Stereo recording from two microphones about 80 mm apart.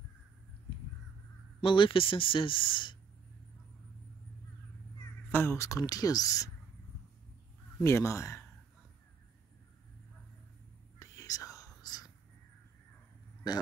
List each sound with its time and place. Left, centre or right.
1.6 s speech: left
5.3 s speech: left
5.6 s speech: left
7.8 s speech: left
11.0 s whispering: left